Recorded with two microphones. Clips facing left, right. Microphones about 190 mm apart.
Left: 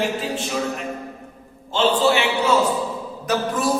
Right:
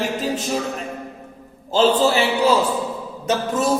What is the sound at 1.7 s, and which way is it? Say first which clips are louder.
Speech: right 2 dB; 35° right (ahead or behind).